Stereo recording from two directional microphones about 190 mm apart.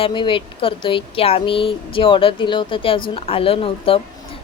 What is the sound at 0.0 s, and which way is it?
Speech, 25° left (ahead or behind).